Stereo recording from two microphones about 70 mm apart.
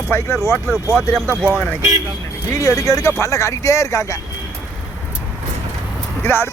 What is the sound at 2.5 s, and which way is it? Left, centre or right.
Speech, left.